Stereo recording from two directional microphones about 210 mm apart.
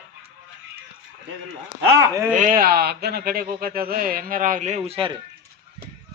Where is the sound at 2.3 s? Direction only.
40° right (ahead or behind).